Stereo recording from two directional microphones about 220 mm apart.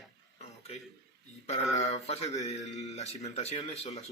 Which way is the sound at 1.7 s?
30° left (ahead or behind).